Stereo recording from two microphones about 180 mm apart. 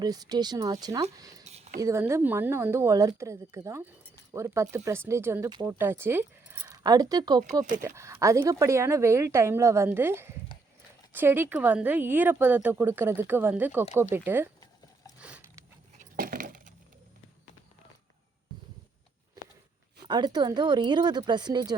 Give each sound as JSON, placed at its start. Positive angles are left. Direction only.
{"t": 0.0, "sound": "a woman's voice", "side_deg": -20}
{"t": 5.5, "sound": "a woman's voice", "side_deg": -25}
{"t": 5.8, "sound": "a woman's voice", "side_deg": -10}
{"t": 7.4, "sound": "speech", "side_deg": -45}
{"t": 7.8, "sound": "speech", "side_deg": -15}
{"t": 16.0, "sound": "coin", "side_deg": -50}
{"t": 20.1, "sound": "a woman's voice", "side_deg": -25}